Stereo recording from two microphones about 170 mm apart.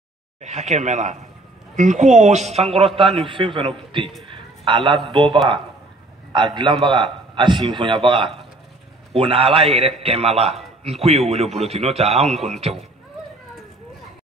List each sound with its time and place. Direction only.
0.4 s a woman's voice: 40° right (ahead or behind)